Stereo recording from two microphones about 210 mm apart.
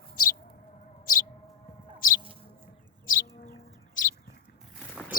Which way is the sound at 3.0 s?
40° left (ahead or behind).